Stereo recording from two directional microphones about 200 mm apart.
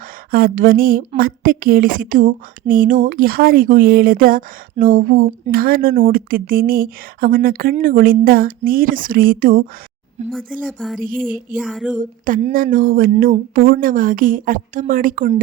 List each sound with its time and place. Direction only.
0.3 s a woman's voice: 45° right (ahead or behind)
10.3 s speech: 5° right (ahead or behind)
11.0 s a woman's voice: 45° right (ahead or behind)
11.5 s speech: centre (ahead or behind)
11.9 s a woman's voice: 40° right (ahead or behind)